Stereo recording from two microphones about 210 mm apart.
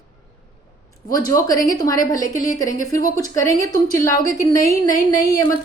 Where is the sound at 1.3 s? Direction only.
15° left (ahead or behind).